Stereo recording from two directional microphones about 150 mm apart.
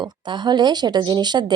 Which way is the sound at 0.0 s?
30° right (ahead or behind).